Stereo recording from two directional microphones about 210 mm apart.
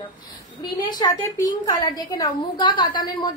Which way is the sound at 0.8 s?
20° left (ahead or behind).